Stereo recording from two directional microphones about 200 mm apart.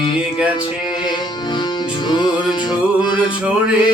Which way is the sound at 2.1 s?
20° left (ahead or behind).